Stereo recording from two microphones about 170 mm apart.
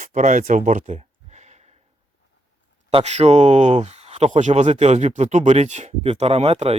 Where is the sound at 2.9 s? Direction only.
40° right (ahead or behind).